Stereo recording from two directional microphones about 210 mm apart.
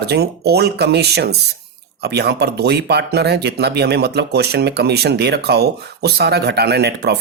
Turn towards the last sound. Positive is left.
turn(degrees=-50)  # may be behind; listen again after turning